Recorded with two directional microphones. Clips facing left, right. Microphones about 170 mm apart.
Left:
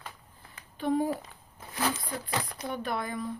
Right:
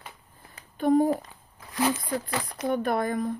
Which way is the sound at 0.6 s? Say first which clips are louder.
Right 7 dB; 45° right (ahead or behind).